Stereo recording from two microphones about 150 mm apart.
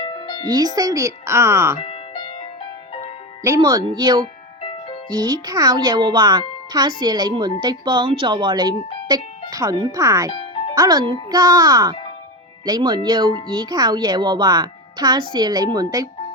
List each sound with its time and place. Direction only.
0.0 s music: 30° left (ahead or behind)
0.4 s a child's voice: 25° right (ahead or behind)
1.8 s music: 35° left (ahead or behind)
3.4 s a child's voice: 25° right (ahead or behind)
4.6 s music: 35° left (ahead or behind)
5.1 s a child's voice: 30° right (ahead or behind)
10.3 s music: 40° left (ahead or behind)
10.8 s a child's voice: 30° right (ahead or behind)